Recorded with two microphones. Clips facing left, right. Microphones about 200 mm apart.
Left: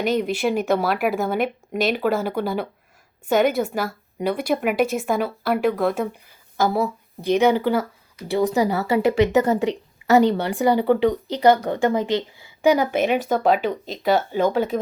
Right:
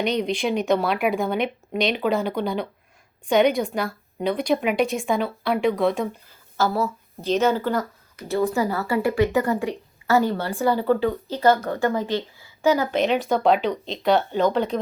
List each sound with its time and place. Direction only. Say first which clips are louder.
0.3 s a woman's voice: left 1 dB; 5° left (ahead or behind)